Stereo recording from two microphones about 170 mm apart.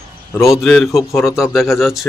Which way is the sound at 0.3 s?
20° left (ahead or behind).